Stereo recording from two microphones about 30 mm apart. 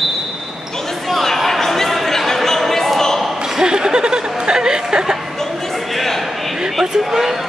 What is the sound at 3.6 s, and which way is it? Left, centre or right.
Chuckle, right.